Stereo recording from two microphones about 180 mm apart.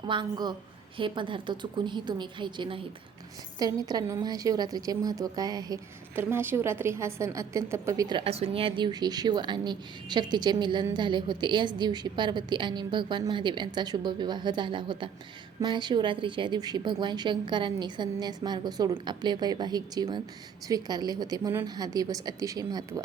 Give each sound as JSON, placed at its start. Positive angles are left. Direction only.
{"t": 0.0, "sound": "a woman's voice", "side_deg": -25}